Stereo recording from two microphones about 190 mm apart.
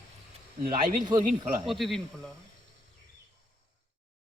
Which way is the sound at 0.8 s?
45° right (ahead or behind).